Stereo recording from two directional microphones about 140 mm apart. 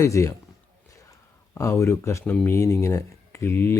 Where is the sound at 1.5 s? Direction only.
20° left (ahead or behind).